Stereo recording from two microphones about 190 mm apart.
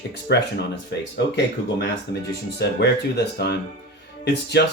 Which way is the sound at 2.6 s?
60° left (ahead or behind).